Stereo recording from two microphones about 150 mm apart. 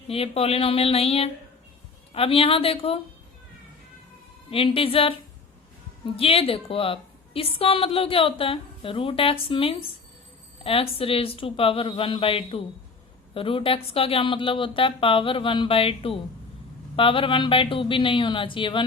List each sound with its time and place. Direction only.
0.1 s a woman's voice: 40° left (ahead or behind)
4.5 s a woman's voice: 35° left (ahead or behind)
6.1 s a woman's voice: 40° left (ahead or behind)